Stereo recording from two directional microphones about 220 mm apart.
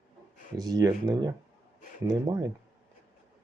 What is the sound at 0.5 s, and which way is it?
Speech, 15° right (ahead or behind).